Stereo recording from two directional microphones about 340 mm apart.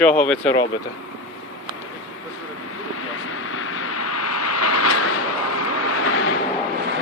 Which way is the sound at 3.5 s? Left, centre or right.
Left.